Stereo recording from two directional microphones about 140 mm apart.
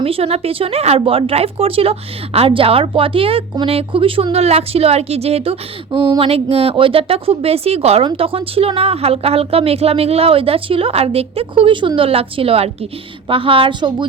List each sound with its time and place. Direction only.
0.0 s speech: 45° right (ahead or behind)